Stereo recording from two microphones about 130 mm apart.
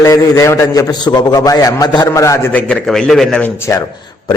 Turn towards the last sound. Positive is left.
turn(degrees=20)  # may be behind; listen again after turning